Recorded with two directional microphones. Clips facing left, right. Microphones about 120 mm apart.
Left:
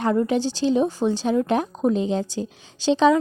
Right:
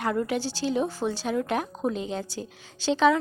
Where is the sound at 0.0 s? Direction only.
25° left (ahead or behind).